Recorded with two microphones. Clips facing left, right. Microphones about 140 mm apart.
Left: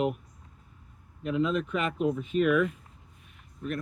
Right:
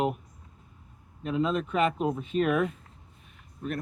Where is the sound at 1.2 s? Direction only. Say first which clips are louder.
Even; 35° right (ahead or behind).